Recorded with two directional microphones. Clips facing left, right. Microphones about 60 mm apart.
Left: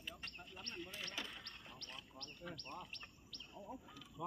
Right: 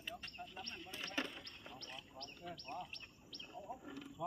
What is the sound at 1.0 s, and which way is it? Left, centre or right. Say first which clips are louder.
Basketball bounce: right 8 dB; right.